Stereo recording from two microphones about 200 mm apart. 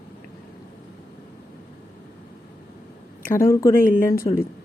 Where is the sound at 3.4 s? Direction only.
15° left (ahead or behind).